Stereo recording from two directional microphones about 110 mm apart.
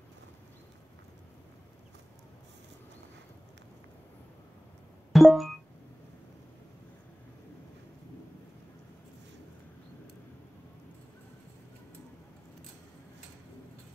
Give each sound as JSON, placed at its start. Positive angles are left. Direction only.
{"t": 5.1, "sound": "music", "side_deg": 0}